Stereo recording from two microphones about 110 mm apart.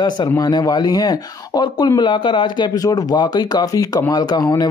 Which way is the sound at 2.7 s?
35° left (ahead or behind).